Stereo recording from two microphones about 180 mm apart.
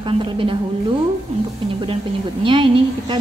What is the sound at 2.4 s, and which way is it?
Speech, 25° right (ahead or behind).